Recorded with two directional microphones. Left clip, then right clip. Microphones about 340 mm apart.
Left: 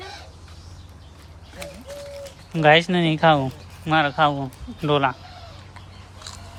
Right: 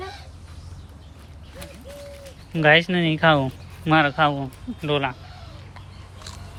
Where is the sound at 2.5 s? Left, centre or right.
Centre.